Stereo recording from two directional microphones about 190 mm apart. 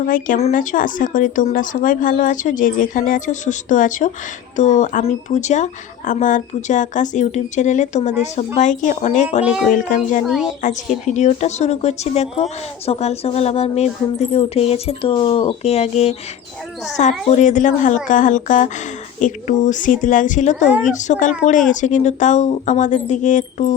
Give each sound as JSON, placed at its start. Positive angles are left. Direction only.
{"t": 0.0, "sound": "speech", "side_deg": 45}
{"t": 10.2, "sound": "a woman's voice", "side_deg": 0}
{"t": 10.6, "sound": "speech", "side_deg": 40}